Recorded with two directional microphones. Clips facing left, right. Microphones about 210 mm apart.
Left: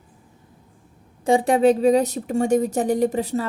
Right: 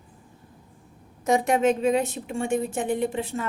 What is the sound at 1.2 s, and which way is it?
A woman's voice, 30° left (ahead or behind).